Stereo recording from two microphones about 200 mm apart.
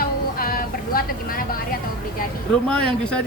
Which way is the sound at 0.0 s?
45° left (ahead or behind).